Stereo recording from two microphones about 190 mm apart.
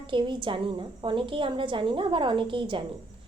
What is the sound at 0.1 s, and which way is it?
A woman's voice, 25° right (ahead or behind).